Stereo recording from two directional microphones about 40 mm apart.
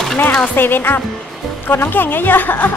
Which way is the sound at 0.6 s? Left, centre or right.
Left.